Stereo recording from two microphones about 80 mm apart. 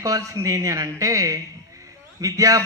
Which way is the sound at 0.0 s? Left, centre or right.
Right.